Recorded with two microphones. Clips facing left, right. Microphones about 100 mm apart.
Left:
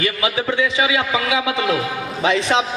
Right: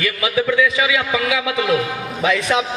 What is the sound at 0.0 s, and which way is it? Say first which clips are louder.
A man's voice: right 1 dB; 30° left (ahead or behind).